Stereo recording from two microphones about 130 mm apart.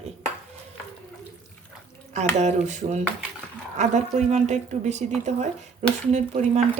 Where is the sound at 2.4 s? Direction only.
65° right (ahead or behind).